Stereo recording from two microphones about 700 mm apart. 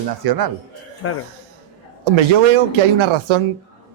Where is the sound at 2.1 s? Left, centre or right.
Right.